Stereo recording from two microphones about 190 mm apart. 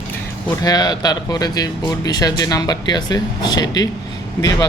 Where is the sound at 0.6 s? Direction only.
20° left (ahead or behind).